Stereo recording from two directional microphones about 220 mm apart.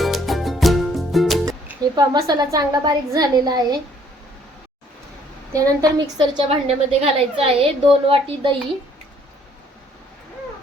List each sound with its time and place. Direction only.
0.0 s music: centre (ahead or behind)
1.5 s a woman's voice: 15° right (ahead or behind)
5.5 s a woman's voice: 15° right (ahead or behind)